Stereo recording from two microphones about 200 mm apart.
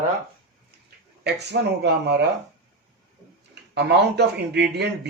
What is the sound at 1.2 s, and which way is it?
Speech, 55° right (ahead or behind).